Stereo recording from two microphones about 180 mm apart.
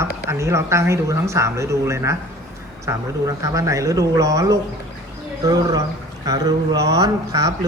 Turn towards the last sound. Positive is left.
turn(degrees=-20)  # may be behind; listen again after turning